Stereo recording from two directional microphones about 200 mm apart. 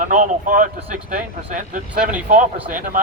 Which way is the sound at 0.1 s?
40° right (ahead or behind).